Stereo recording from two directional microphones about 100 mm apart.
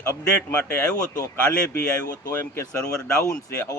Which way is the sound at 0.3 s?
15° left (ahead or behind).